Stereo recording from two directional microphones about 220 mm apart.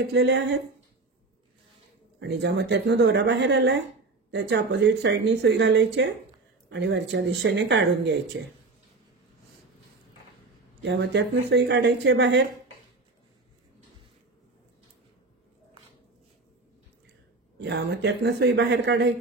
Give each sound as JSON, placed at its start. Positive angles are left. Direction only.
{"t": 0.0, "sound": "speech", "side_deg": -50}
{"t": 2.1, "sound": "speech", "side_deg": -50}
{"t": 10.8, "sound": "speech", "side_deg": -55}
{"t": 17.6, "sound": "speech", "side_deg": -50}